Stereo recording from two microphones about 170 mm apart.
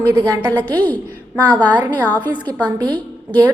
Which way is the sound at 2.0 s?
10° left (ahead or behind).